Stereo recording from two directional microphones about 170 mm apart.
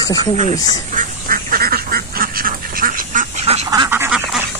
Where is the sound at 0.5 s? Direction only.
25° left (ahead or behind).